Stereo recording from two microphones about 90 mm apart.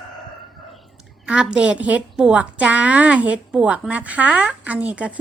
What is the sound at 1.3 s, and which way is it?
A woman's voice, 10° right (ahead or behind).